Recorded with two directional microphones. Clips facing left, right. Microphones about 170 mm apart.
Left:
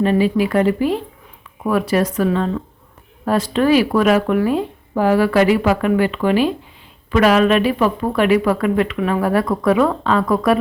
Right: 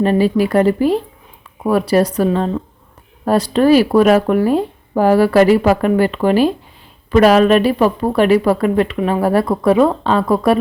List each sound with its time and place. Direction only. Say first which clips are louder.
0.0 s a woman's voice: right 2 dB; 40° right (ahead or behind)